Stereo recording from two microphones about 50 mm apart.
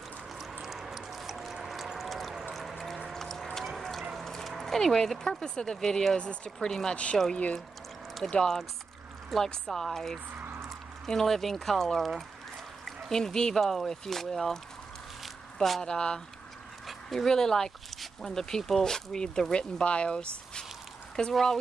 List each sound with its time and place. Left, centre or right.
0.4 s a sound: centre
2.0 s ratchet: centre
3.1 s mechanisms: centre
4.2 s speech: centre
6.1 s speech: left
8.3 s speech: centre
15.2 s squish: centre
15.8 s speech: centre
21.3 s speech: centre